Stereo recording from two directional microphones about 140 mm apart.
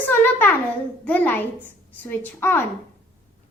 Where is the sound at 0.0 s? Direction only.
15° left (ahead or behind).